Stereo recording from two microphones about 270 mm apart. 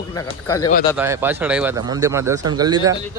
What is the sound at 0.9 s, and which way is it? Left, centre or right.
Speech, centre.